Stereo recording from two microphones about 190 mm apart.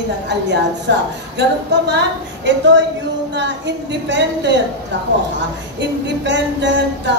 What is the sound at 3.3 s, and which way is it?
Child singing, 70° right (ahead or behind).